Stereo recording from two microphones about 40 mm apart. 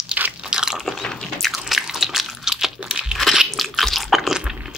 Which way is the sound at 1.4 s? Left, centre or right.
Centre.